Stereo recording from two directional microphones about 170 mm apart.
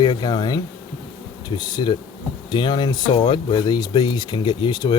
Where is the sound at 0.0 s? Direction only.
25° left (ahead or behind).